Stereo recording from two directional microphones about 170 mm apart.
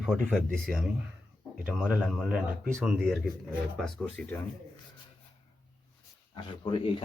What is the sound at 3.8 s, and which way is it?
Speech, 5° left (ahead or behind).